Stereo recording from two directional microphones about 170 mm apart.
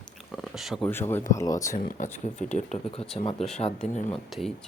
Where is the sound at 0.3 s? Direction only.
Centre (ahead or behind).